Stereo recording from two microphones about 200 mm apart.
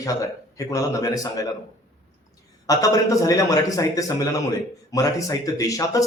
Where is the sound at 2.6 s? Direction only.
15° left (ahead or behind).